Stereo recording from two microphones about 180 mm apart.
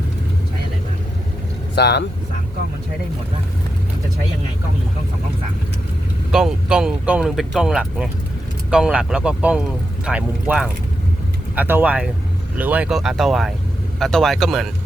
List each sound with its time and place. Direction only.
1.7 s speech: 70° left (ahead or behind)
6.3 s speech: 5° right (ahead or behind)